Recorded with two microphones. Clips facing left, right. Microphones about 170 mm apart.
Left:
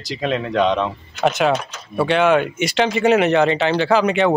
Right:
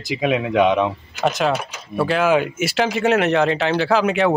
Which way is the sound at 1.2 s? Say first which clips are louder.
Left 2 dB; centre (ahead or behind).